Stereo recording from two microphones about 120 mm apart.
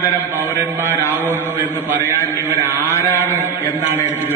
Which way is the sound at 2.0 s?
20° left (ahead or behind).